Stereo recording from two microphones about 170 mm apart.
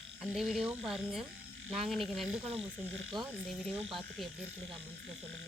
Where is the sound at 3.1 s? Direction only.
25° right (ahead or behind).